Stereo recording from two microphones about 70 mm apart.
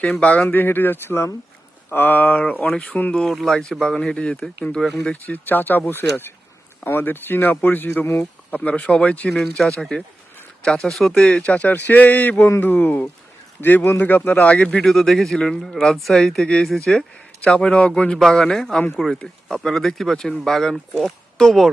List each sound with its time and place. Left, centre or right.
0.0 s speech: centre
0.4 s speech: left
3.2 s speech: centre
5.1 s speech: left
8.5 s speech: centre
9.3 s speech: centre
17.4 s speech: centre